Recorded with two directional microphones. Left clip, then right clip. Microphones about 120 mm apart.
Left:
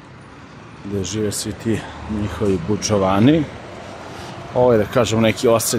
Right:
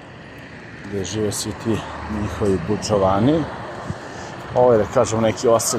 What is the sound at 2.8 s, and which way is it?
Speech, 45° left (ahead or behind).